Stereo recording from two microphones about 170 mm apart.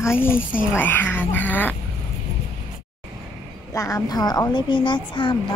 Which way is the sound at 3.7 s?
15° left (ahead or behind).